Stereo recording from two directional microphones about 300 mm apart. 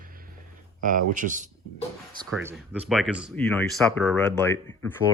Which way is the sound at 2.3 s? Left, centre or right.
Centre.